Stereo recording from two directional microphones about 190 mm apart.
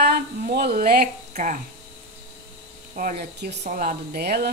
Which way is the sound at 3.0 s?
50° right (ahead or behind).